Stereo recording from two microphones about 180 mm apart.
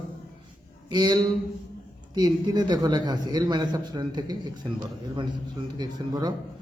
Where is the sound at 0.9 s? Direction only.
25° right (ahead or behind).